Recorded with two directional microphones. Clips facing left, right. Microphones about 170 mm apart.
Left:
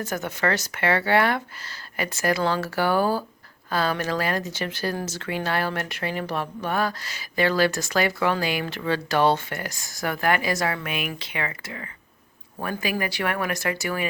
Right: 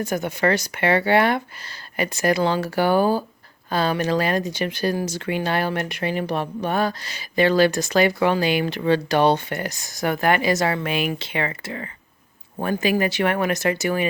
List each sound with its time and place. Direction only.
0.0 s speech: 15° right (ahead or behind)